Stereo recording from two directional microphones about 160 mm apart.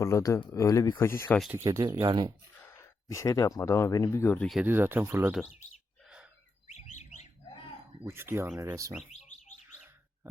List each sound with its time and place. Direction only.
0.0 s speech: 20° left (ahead or behind)
1.5 s speech: 15° right (ahead or behind)
2.6 s speech: 15° left (ahead or behind)
4.6 s speech: 15° right (ahead or behind)
8.0 s speech: 15° right (ahead or behind)
9.0 s bird: 50° left (ahead or behind)